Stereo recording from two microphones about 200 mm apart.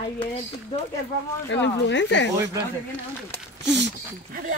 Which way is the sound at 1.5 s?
65° left (ahead or behind).